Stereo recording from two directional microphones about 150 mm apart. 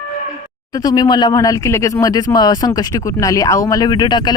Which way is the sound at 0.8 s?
25° left (ahead or behind).